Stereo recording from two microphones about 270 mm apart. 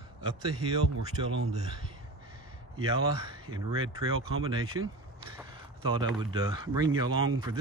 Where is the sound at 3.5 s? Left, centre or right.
Centre.